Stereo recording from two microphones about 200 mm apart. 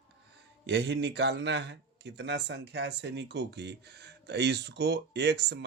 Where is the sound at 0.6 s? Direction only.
60° right (ahead or behind).